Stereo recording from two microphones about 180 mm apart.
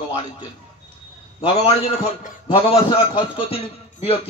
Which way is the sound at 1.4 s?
30° left (ahead or behind).